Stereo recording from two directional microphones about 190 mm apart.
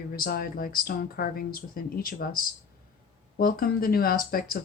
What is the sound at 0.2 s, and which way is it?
Speech, 50° left (ahead or behind).